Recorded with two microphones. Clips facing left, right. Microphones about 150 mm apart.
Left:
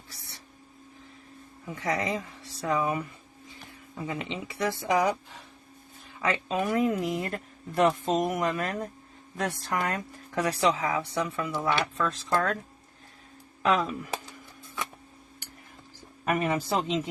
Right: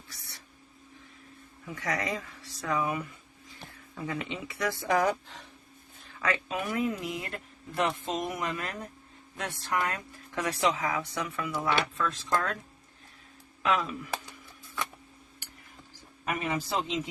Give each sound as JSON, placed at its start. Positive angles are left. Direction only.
{"t": 1.6, "sound": "speech", "side_deg": 25}
{"t": 3.7, "sound": "speech", "side_deg": 20}
{"t": 6.2, "sound": "speech", "side_deg": 25}
{"t": 11.9, "sound": "speech", "side_deg": 40}
{"t": 13.6, "sound": "speech", "side_deg": 40}
{"t": 16.2, "sound": "a man's voice", "side_deg": 45}